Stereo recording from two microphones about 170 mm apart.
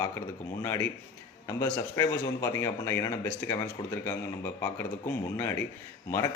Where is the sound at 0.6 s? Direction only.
15° left (ahead or behind).